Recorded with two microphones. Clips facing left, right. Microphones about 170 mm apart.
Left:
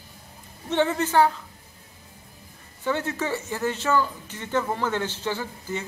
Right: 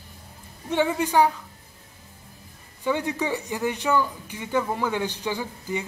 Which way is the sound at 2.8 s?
15° right (ahead or behind).